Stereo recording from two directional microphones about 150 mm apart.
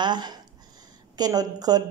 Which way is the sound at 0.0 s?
30° right (ahead or behind).